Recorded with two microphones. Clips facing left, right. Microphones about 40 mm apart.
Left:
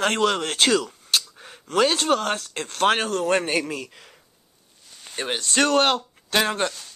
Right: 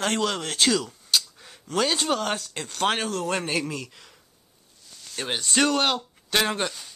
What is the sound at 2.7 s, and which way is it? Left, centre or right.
Speech, left.